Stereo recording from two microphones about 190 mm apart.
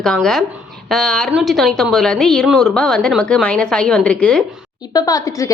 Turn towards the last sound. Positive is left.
turn(degrees=20)  # may be behind; listen again after turning